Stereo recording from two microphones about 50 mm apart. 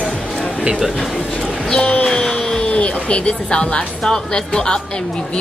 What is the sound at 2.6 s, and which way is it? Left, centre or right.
A woman's voice, left.